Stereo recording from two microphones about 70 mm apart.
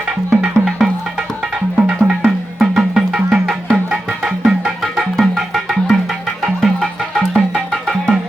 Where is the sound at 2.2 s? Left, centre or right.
Centre.